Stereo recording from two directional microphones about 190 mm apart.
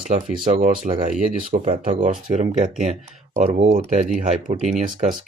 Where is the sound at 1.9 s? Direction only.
30° right (ahead or behind).